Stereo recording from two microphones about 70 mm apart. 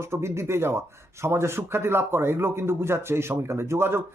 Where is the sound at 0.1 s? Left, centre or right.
Right.